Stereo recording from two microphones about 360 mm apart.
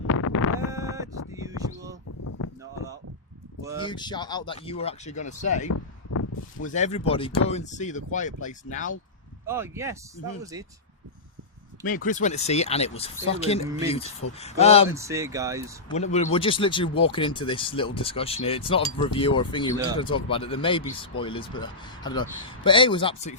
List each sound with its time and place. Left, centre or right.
0.1 s a sound: left
0.7 s a sound: centre
2.2 s a sound: left
3.8 s speech: centre
5.6 s a sound: left
6.7 s speech: centre
9.5 s speech: centre
11.9 s speech: left
13.7 s speech: centre
14.3 s speech: centre
14.8 s speech: centre
16.0 s speech: centre
19.7 s speech: centre
20.0 s speech: centre